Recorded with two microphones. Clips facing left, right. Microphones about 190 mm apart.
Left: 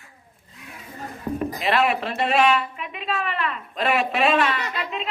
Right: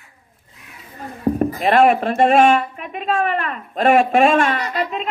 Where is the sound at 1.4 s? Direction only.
45° right (ahead or behind).